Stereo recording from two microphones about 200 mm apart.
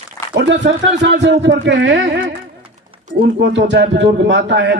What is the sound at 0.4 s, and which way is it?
A man's voice, 60° right (ahead or behind).